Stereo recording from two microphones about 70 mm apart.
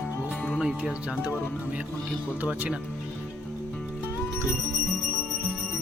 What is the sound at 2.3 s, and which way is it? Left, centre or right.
Speech, right.